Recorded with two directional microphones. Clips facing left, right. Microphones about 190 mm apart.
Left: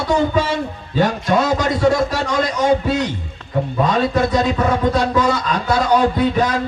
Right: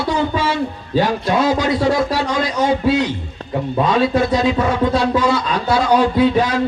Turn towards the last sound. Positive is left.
turn(degrees=45)  # may be behind; listen again after turning